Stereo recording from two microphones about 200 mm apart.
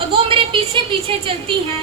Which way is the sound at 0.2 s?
30° right (ahead or behind).